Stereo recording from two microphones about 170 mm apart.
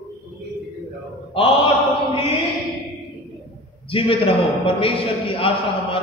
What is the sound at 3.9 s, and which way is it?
A man's voice, 30° left (ahead or behind).